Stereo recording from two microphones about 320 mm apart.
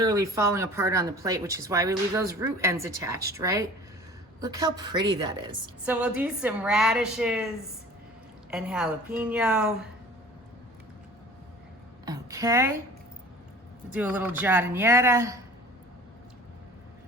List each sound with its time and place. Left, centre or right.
0.0 s a woman's voice: centre
8.4 s a woman's voice: centre
12.0 s speech: centre
13.9 s speech: centre